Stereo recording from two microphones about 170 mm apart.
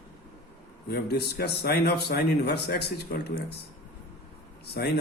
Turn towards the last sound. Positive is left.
turn(degrees=75)  # may be behind; listen again after turning